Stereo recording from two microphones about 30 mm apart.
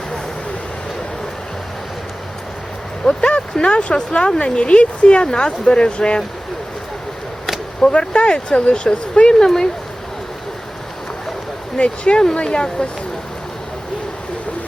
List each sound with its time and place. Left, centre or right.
3.0 s a sound: left
3.5 s speech: left
7.8 s speech: left
9.4 s speech: left
11.8 s speech: left